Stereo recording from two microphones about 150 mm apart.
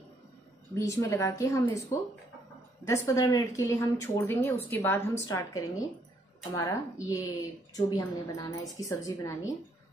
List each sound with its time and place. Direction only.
0.7 s a woman's voice: 20° left (ahead or behind)
2.8 s a woman's voice: 20° left (ahead or behind)